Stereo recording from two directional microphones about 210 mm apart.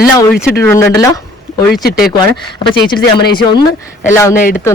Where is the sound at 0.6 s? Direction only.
15° left (ahead or behind).